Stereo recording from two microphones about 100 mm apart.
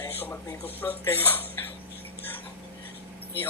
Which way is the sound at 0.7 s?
20° left (ahead or behind).